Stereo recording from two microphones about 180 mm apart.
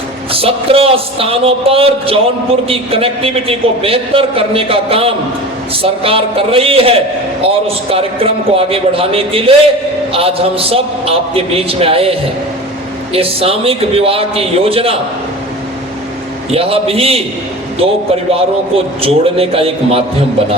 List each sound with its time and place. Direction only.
0.3 s a man's voice: 30° right (ahead or behind)
13.1 s a man's voice: 30° right (ahead or behind)
16.6 s a man's voice: 35° right (ahead or behind)